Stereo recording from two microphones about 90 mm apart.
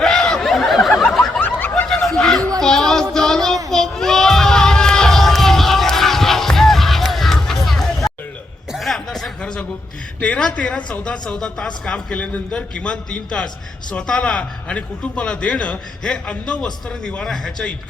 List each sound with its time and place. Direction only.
0.0 s a sound: 5° left (ahead or behind)
1.0 s snicker: centre (ahead or behind)
1.4 s snicker: 20° left (ahead or behind)
2.0 s a sound: 5° left (ahead or behind)
2.6 s music: 5° left (ahead or behind)
3.7 s crowd: 5° left (ahead or behind)
8.7 s chuckle: centre (ahead or behind)
10.2 s a man's voice: 10° left (ahead or behind)